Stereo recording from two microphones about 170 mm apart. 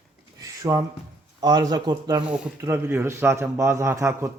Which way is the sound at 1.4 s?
25° right (ahead or behind).